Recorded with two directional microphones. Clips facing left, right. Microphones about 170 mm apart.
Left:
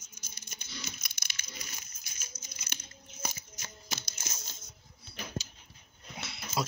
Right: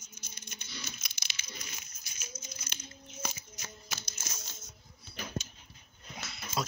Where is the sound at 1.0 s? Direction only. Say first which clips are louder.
Even; 50° left (ahead or behind).